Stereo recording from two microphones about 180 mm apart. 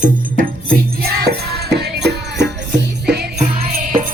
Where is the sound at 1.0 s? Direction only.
60° right (ahead or behind).